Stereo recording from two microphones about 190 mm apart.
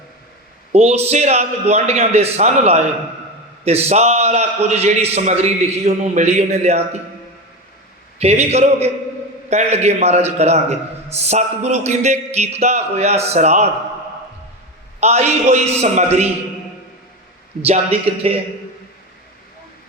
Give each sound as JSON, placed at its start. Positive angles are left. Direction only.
{"t": 0.7, "sound": "a man's voice", "side_deg": -35}
{"t": 8.2, "sound": "a man's voice", "side_deg": -35}
{"t": 15.0, "sound": "a man's voice", "side_deg": -35}
{"t": 17.6, "sound": "a man's voice", "side_deg": -30}